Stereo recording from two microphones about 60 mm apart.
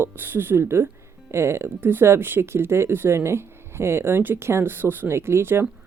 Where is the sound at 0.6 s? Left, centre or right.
Right.